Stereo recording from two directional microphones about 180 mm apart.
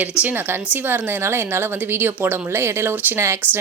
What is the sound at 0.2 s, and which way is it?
Speech, 10° right (ahead or behind).